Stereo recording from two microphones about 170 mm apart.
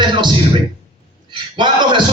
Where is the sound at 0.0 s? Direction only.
25° right (ahead or behind).